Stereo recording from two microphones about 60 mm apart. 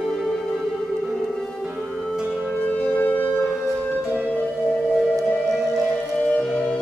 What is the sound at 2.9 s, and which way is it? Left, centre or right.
Music, left.